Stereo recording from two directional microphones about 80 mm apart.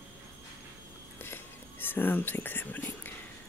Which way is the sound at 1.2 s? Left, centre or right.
Left.